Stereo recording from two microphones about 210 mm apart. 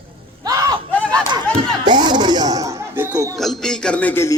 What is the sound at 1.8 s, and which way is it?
Chatter, 20° right (ahead or behind).